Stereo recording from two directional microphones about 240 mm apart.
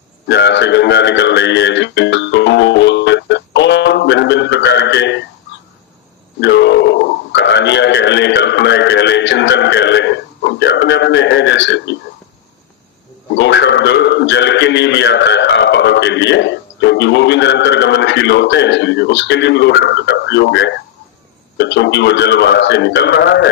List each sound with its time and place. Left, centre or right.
0.3 s music: left
6.4 s a man's voice: left
13.3 s a man's voice: left